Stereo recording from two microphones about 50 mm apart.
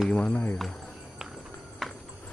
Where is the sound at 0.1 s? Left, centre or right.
Left.